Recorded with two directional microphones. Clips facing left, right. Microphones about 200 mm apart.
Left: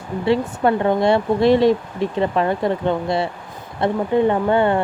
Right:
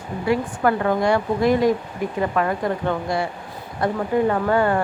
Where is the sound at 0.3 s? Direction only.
25° left (ahead or behind).